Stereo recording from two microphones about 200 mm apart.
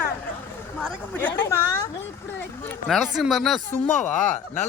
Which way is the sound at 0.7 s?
5° left (ahead or behind).